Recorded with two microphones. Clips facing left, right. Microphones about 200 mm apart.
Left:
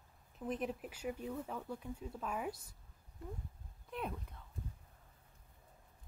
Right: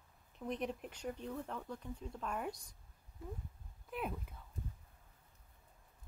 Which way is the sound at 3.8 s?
5° right (ahead or behind).